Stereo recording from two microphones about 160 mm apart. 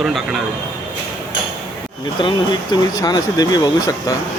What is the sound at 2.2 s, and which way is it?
Speech, 25° left (ahead or behind).